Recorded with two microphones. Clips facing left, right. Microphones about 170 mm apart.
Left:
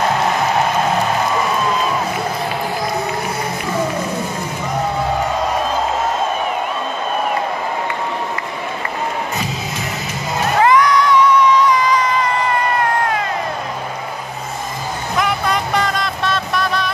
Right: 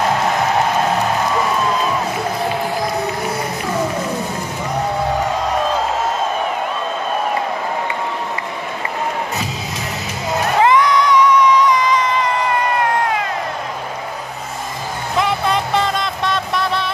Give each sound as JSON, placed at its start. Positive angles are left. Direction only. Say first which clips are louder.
{"t": 10.6, "sound": "music", "louder": "left 1 dB", "side_deg": -25}
{"t": 15.1, "sound": "music", "louder": "right 1 dB", "side_deg": -25}